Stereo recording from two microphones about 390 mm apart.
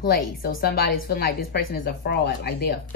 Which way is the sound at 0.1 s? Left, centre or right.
Left.